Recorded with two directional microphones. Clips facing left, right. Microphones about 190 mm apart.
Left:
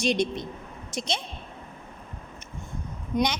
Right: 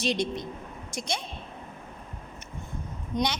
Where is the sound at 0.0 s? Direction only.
20° left (ahead or behind).